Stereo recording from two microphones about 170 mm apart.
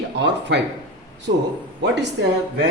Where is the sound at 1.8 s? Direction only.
90° right.